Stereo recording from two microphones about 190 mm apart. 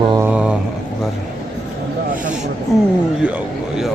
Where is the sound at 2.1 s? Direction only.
45° right (ahead or behind).